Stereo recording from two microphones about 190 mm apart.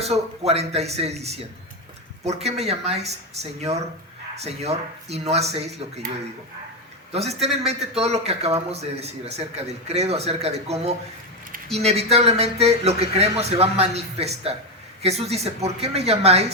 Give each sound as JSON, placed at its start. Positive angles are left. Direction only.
{"t": 0.0, "sound": "a man's voice", "side_deg": -35}
{"t": 4.4, "sound": "a man's voice", "side_deg": -35}
{"t": 7.1, "sound": "a man's voice", "side_deg": -35}